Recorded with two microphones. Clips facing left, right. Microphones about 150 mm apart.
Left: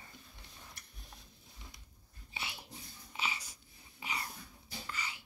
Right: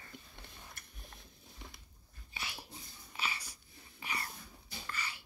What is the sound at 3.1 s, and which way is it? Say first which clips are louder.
Wheeze: left 1 dB; 20° left (ahead or behind).